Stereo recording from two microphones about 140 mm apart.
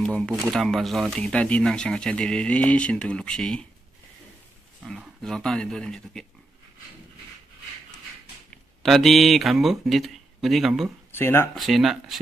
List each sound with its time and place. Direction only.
0.5 s speech: centre (ahead or behind)
4.8 s speech: centre (ahead or behind)
8.8 s speech: centre (ahead or behind)
11.1 s speech: 15° left (ahead or behind)
11.5 s speech: centre (ahead or behind)